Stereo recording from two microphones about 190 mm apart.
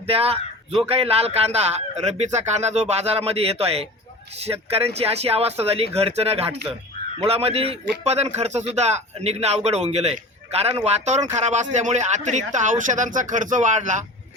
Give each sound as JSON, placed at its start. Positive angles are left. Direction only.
{"t": 0.0, "sound": "a man's voice", "side_deg": -30}